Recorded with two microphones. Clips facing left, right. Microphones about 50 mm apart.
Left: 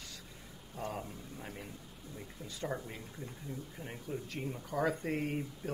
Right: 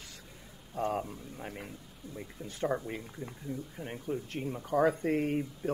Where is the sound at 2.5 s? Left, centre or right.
Right.